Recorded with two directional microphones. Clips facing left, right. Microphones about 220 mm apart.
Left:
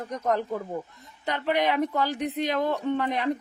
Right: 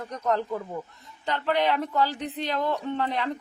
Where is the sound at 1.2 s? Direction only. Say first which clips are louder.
Even; 15° left (ahead or behind).